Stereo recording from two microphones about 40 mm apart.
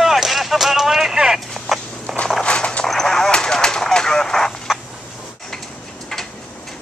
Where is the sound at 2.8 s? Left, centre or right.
Centre.